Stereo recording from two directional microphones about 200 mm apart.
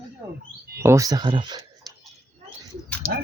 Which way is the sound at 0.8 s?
15° right (ahead or behind).